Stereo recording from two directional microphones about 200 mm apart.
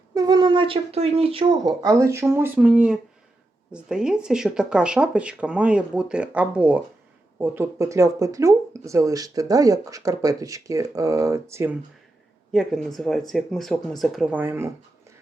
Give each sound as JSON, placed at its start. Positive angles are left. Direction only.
{"t": 0.1, "sound": "speech", "side_deg": -20}
{"t": 12.5, "sound": "speech", "side_deg": 0}